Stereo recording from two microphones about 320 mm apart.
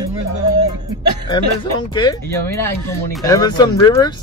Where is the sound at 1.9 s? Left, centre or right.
Centre.